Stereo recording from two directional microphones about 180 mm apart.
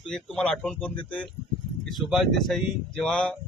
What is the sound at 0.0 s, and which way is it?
Speech, 5° left (ahead or behind).